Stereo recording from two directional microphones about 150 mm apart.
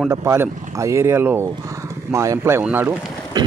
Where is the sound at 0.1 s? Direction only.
20° right (ahead or behind).